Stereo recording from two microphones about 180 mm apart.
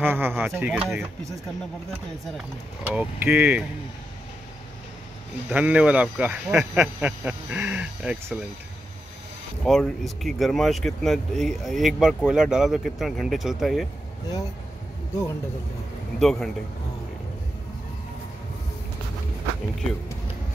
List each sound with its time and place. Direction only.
0.0 s speech: 10° right (ahead or behind)
2.3 s speech: 10° right (ahead or behind)
5.5 s speech: 5° right (ahead or behind)
9.7 s speech: centre (ahead or behind)
16.2 s speech: centre (ahead or behind)